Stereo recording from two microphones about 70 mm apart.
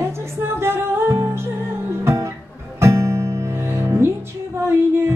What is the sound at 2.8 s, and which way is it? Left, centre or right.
Music, right.